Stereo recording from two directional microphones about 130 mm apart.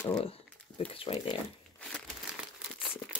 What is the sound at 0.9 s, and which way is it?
Speech, 45° left (ahead or behind).